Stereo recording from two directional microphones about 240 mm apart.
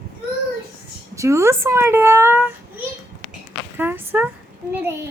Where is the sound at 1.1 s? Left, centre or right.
Centre.